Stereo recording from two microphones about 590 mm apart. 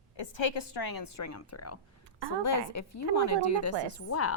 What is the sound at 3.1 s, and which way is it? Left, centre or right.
A woman's voice, left.